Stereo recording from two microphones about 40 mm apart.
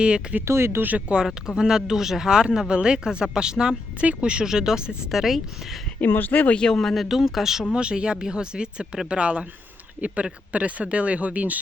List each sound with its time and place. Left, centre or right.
0.0 s speech: right
0.6 s speech: right
0.9 s speech: right
1.1 s speech: centre
4.4 s speech: centre
6.0 s speech: left
6.6 s speech: centre
7.0 s speech: centre
7.7 s speech: right
10.5 s speech: right